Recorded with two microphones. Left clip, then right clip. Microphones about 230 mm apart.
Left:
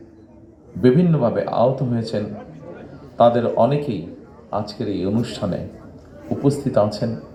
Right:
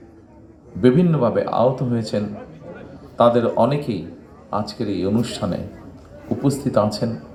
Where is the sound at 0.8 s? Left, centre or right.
Right.